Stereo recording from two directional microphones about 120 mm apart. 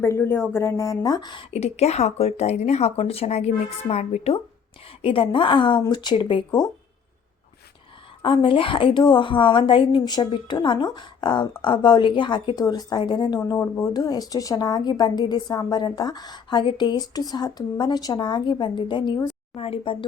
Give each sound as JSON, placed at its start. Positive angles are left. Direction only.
{"t": 0.0, "sound": "a woman's voice", "side_deg": 20}
{"t": 1.5, "sound": "a woman's voice", "side_deg": 60}
{"t": 5.0, "sound": "a woman's voice", "side_deg": 50}
{"t": 8.2, "sound": "a woman's voice", "side_deg": 45}